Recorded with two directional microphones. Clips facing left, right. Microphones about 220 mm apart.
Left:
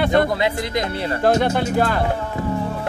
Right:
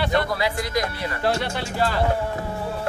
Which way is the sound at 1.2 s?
50° left (ahead or behind).